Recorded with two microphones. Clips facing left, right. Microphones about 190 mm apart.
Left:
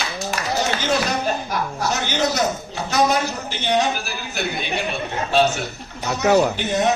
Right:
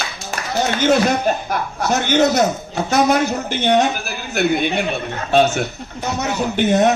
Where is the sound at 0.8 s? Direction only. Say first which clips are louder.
Right 6 dB; 55° right (ahead or behind).